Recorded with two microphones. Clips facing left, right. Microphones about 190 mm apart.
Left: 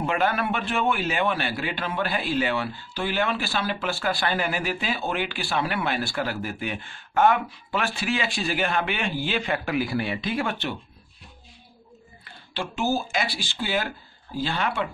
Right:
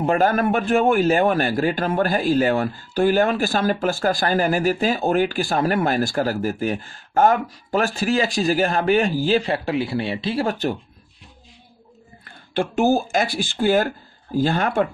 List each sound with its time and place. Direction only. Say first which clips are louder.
0.0 s a man's voice: right 6 dB; 45° right (ahead or behind)
12.3 s speech: right 9 dB; 50° right (ahead or behind)